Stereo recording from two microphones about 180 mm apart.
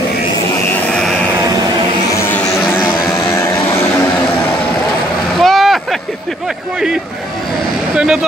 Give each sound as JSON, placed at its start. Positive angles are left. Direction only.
{"t": 2.1, "sound": "vehicle", "side_deg": 10}
{"t": 3.3, "sound": "a sound", "side_deg": 15}
{"t": 5.4, "sound": "vehicle", "side_deg": 0}
{"t": 7.9, "sound": "vehicle", "side_deg": -5}